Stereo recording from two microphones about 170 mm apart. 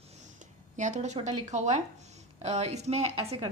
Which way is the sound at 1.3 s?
40° right (ahead or behind).